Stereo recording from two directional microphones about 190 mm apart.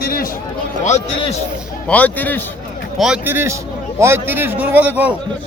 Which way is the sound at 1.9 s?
10° left (ahead or behind).